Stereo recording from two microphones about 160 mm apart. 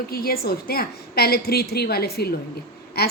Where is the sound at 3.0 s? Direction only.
80° left.